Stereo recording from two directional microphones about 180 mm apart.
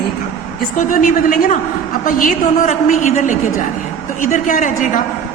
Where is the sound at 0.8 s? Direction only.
50° left (ahead or behind).